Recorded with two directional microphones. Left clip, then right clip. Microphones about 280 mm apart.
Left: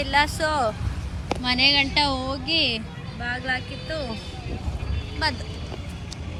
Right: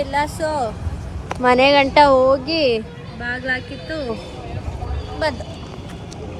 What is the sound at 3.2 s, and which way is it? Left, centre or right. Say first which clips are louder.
Speech: right 4 dB; centre.